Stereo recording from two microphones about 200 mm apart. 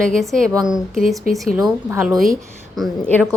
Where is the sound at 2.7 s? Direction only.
5° left (ahead or behind).